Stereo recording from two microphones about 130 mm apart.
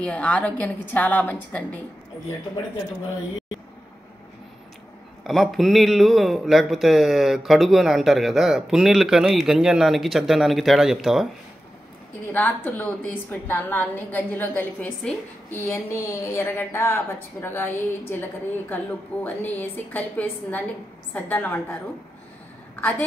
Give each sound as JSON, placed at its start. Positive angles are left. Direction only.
{"t": 0.0, "sound": "a woman's voice", "side_deg": 10}
{"t": 5.2, "sound": "speech", "side_deg": 0}
{"t": 12.3, "sound": "a woman's voice", "side_deg": 15}
{"t": 22.8, "sound": "a woman's voice", "side_deg": 10}